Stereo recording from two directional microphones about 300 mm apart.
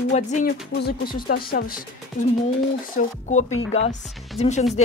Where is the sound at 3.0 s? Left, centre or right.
Left.